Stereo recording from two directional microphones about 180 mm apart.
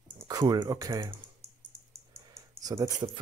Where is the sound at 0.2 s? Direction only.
20° right (ahead or behind).